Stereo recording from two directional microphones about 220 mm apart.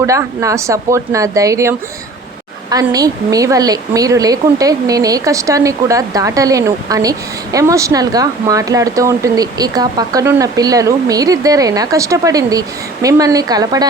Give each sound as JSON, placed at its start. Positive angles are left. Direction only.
{"t": 0.0, "sound": "a woman's voice", "side_deg": -15}